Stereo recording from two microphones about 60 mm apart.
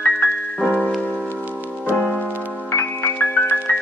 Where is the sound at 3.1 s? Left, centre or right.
Left.